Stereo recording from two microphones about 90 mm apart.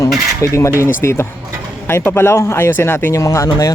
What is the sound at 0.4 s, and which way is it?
Speech, 35° left (ahead or behind).